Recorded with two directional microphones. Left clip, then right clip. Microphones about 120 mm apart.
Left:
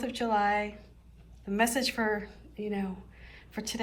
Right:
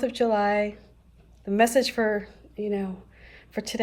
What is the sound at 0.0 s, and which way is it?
A woman's voice, 45° right (ahead or behind).